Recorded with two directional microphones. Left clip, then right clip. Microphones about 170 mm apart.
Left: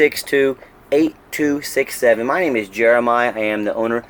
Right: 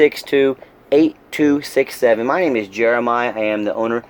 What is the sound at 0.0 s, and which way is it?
Speech, 10° right (ahead or behind).